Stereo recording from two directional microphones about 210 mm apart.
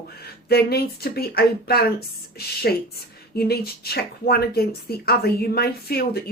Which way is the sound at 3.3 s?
50° left (ahead or behind).